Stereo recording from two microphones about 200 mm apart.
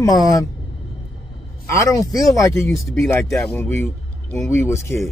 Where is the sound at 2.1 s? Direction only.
15° left (ahead or behind).